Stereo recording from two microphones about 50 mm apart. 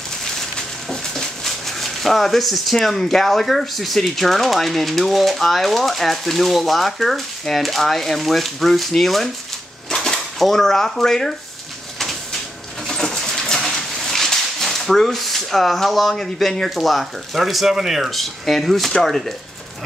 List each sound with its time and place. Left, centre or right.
0.6 s speech: centre
12.8 s pigeon: centre
13.7 s speech: centre